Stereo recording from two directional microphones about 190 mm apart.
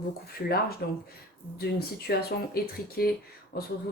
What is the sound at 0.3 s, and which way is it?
A woman's voice, 55° left (ahead or behind).